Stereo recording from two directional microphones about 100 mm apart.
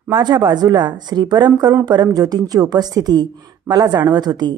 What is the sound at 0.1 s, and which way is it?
A woman's voice, 45° right (ahead or behind).